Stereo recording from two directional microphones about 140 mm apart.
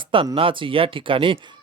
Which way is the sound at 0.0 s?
40° right (ahead or behind).